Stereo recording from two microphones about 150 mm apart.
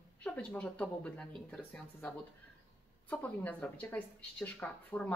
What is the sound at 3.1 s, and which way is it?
Speech, 10° left (ahead or behind).